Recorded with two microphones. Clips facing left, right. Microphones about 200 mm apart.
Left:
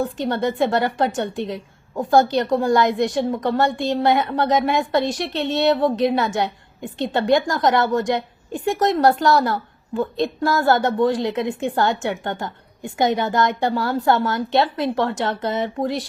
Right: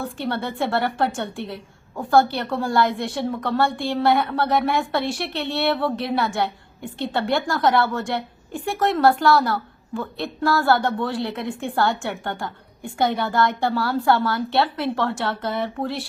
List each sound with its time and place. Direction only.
0.0 s a woman's voice: 15° left (ahead or behind)